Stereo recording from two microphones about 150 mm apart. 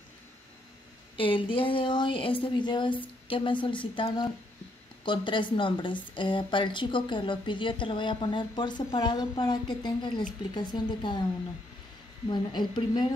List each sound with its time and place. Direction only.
1.1 s a woman's voice: 35° left (ahead or behind)
12.3 s a woman's voice: 30° left (ahead or behind)